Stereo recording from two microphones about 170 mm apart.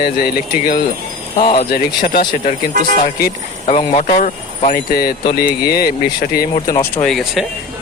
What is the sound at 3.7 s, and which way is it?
Speech, 40° left (ahead or behind).